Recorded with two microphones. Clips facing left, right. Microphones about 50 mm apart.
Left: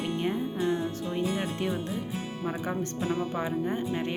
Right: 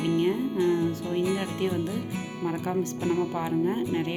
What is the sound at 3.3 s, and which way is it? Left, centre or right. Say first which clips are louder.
Speech: right 3 dB; centre.